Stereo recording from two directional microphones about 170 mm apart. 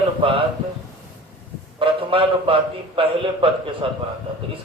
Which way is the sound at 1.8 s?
30° right (ahead or behind).